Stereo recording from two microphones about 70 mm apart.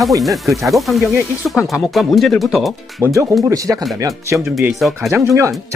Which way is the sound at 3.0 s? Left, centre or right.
Right.